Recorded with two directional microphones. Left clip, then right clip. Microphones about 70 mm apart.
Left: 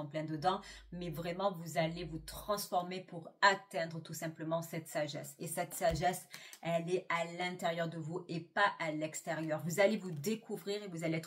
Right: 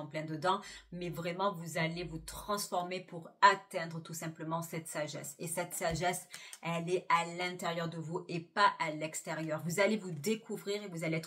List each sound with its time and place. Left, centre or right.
0.1 s speech: right